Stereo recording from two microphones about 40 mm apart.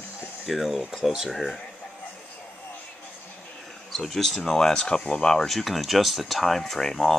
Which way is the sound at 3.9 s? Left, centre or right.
Centre.